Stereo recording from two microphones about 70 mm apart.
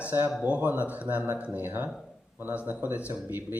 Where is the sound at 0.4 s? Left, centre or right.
Right.